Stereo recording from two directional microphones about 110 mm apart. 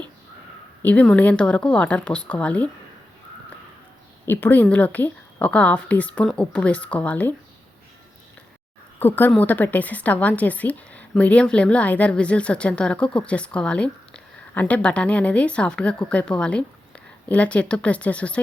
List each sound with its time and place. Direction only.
0.8 s a woman's voice: 15° left (ahead or behind)
4.3 s a woman's voice: 15° left (ahead or behind)
9.0 s a woman's voice: 15° left (ahead or behind)